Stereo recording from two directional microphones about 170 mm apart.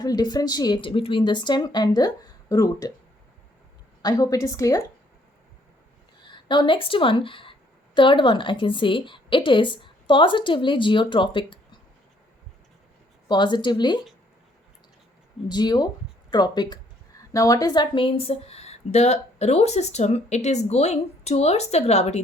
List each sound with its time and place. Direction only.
0.0 s a woman's voice: 25° left (ahead or behind)
4.0 s a woman's voice: 20° left (ahead or behind)
6.2 s a woman's voice: 25° left (ahead or behind)
13.2 s a woman's voice: 25° left (ahead or behind)
15.4 s a woman's voice: 25° left (ahead or behind); by 22.2 s 40° left (ahead or behind)